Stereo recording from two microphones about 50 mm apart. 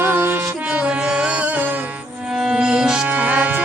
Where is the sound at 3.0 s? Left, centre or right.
Right.